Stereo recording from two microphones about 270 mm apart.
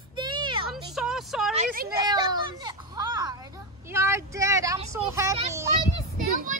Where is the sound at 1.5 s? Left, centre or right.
Right.